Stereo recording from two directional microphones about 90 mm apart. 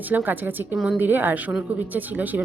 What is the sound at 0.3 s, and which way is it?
A woman's voice, 20° right (ahead or behind).